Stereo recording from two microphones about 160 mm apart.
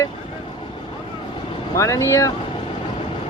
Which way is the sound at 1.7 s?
20° left (ahead or behind).